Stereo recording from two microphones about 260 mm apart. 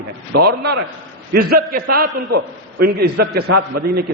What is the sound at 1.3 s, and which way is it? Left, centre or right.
A man's voice, right.